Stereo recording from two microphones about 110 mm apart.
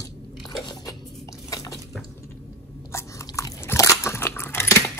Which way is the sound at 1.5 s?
30° left (ahead or behind).